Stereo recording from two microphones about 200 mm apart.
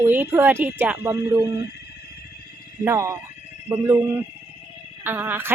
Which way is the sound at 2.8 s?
15° right (ahead or behind).